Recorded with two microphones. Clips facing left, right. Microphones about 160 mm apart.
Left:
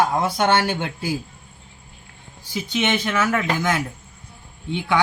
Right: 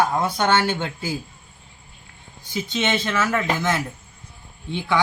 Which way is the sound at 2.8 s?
15° left (ahead or behind).